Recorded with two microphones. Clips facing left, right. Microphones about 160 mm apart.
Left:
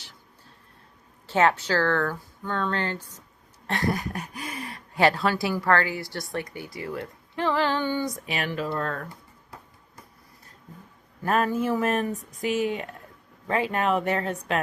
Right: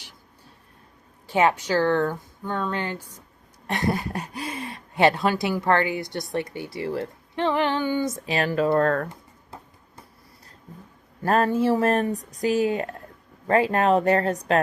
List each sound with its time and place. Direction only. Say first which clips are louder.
1.3 s speech: right 1 dB; 15° right (ahead or behind)
3.7 s speech: right 2 dB; 20° right (ahead or behind)
8.6 s speech: right 9 dB; 55° right (ahead or behind)
11.3 s speech: right 4 dB; 30° right (ahead or behind)